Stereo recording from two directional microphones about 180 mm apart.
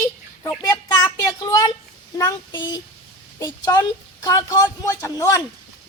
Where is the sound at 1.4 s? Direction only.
20° left (ahead or behind).